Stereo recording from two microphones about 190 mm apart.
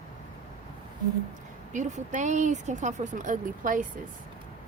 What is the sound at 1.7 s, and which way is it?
A woman's voice, 40° right (ahead or behind).